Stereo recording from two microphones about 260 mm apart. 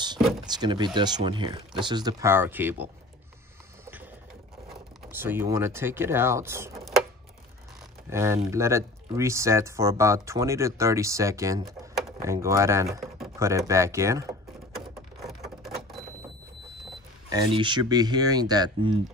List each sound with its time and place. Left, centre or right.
0.5 s speech: centre
3.8 s printer: centre
4.6 s speech: centre
8.1 s speech: centre
14.7 s a sound: centre
17.3 s speech: centre